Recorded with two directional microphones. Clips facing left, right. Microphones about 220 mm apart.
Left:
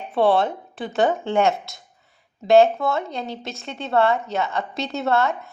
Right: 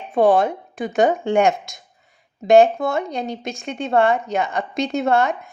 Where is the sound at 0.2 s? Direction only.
15° right (ahead or behind).